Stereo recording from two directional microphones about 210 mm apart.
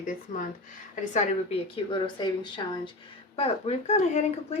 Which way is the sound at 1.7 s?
20° left (ahead or behind).